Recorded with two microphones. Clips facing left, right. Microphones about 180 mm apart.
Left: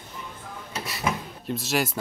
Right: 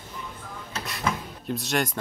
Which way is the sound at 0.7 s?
5° left (ahead or behind).